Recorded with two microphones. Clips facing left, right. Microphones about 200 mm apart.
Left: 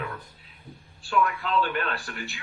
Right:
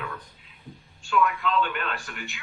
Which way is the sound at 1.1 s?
35° left (ahead or behind).